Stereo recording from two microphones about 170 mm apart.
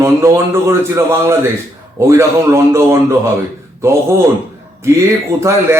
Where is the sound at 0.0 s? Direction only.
15° right (ahead or behind).